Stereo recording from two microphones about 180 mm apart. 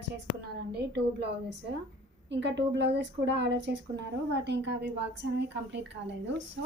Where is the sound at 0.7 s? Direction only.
70° right (ahead or behind).